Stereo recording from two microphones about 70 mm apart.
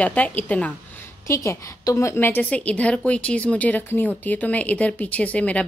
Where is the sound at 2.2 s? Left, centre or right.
Left.